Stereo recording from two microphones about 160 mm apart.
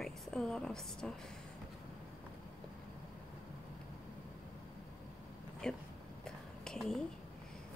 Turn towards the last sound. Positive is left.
turn(degrees=5)  # may be behind; listen again after turning